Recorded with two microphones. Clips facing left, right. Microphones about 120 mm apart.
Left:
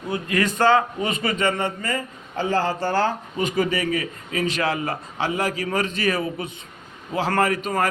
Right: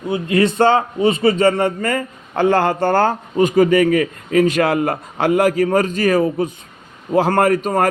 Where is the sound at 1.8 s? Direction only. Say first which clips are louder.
Right 7 dB; 50° right (ahead or behind).